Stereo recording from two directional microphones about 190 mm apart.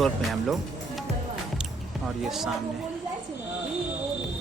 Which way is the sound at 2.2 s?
Centre (ahead or behind).